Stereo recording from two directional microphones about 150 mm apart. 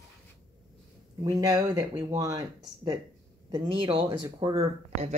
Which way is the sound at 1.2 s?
25° right (ahead or behind).